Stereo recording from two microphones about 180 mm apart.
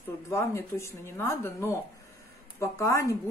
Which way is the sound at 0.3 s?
15° left (ahead or behind).